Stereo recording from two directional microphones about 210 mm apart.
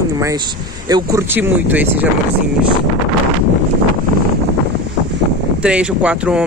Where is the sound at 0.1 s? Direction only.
15° right (ahead or behind).